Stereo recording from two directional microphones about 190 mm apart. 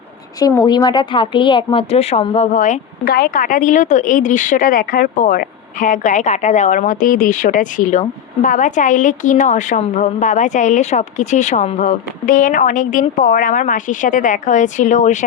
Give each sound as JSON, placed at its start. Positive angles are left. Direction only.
{"t": 0.3, "sound": "a woman's voice", "side_deg": 20}
{"t": 2.5, "sound": "a woman's voice", "side_deg": 45}